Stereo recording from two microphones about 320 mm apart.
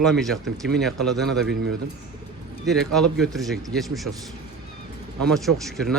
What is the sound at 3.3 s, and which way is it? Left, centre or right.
Speech, centre.